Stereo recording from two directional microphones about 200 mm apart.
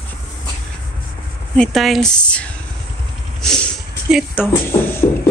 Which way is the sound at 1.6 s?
Centre (ahead or behind).